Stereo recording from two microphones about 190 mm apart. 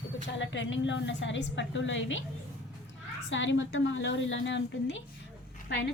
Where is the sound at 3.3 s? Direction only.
75° left (ahead or behind).